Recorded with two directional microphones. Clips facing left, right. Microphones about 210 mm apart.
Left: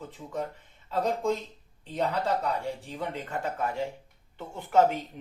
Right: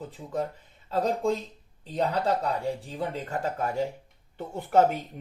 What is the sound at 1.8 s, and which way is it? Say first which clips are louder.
Speech: right 2 dB; 35° right (ahead or behind).